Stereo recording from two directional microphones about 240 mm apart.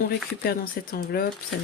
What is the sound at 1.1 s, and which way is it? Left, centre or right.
Speech, left.